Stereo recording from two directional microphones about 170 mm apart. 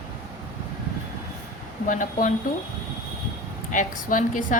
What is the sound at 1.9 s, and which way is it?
Speech, 50° left (ahead or behind).